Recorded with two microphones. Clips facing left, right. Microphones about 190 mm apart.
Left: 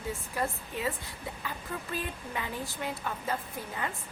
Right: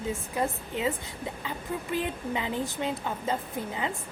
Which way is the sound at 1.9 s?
20° right (ahead or behind).